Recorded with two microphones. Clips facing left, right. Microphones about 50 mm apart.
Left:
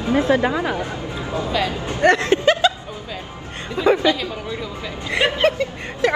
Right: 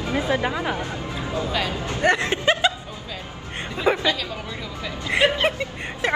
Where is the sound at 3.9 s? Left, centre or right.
Right.